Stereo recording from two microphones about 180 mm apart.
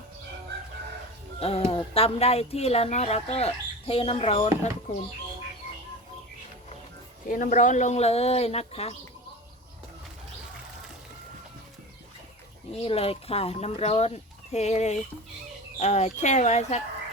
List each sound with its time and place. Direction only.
1.4 s speech: 35° left (ahead or behind)
7.3 s speech: 45° left (ahead or behind)
12.7 s speech: 35° left (ahead or behind)